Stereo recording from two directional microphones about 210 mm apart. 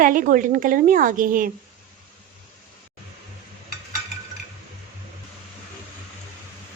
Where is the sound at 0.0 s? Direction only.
40° right (ahead or behind).